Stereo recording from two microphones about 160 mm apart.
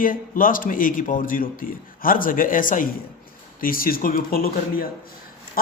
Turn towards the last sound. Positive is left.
turn(degrees=65)  # may be behind; listen again after turning